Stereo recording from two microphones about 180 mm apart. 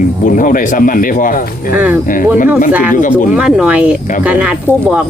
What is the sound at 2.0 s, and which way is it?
Speech, 50° left (ahead or behind).